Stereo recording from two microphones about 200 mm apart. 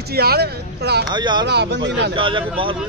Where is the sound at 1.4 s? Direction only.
55° right (ahead or behind).